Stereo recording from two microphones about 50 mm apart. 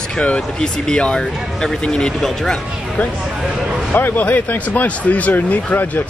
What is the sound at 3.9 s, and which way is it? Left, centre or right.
Speech, left.